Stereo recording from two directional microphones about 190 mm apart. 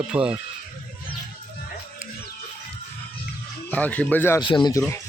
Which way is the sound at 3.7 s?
10° left (ahead or behind).